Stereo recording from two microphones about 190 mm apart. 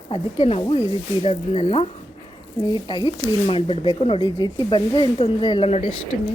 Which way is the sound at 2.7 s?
25° left (ahead or behind).